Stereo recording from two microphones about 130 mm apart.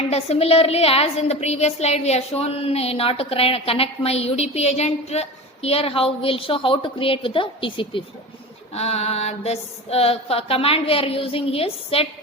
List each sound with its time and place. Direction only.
0.1 s a woman's voice: 50° left (ahead or behind)
8.7 s a woman's voice: 55° left (ahead or behind)